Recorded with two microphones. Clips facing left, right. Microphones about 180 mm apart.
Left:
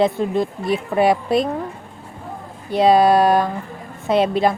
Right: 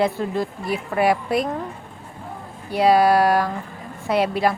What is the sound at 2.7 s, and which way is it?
A woman's voice, 20° left (ahead or behind).